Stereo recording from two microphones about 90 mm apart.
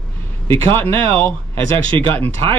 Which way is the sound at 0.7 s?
25° left (ahead or behind).